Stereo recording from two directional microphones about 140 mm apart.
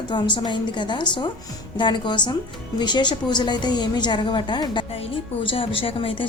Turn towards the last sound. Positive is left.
turn(degrees=40)  # may be behind; listen again after turning